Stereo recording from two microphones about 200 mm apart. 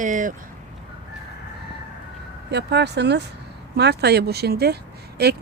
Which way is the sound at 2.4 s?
55° right (ahead or behind).